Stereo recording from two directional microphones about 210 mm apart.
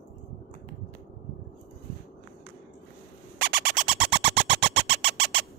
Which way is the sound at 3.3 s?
55° right (ahead or behind).